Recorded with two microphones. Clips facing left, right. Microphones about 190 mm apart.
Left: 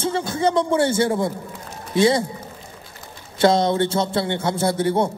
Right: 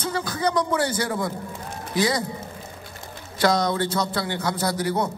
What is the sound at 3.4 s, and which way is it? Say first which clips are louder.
A man's voice: left 4 dB; 25° left (ahead or behind).